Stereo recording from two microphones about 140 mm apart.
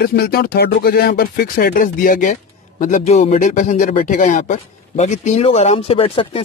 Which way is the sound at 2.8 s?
65° left (ahead or behind).